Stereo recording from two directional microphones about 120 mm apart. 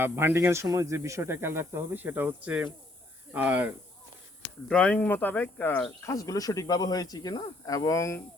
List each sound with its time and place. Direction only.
0.0 s speech: 20° right (ahead or behind)
4.7 s speech: 10° left (ahead or behind)
6.1 s speech: 30° left (ahead or behind)